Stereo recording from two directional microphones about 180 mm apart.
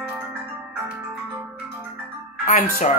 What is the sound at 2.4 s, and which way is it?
Speech, 45° left (ahead or behind).